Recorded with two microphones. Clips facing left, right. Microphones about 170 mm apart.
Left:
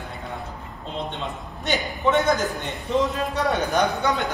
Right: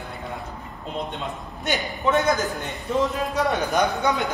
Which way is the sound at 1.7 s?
Centre (ahead or behind).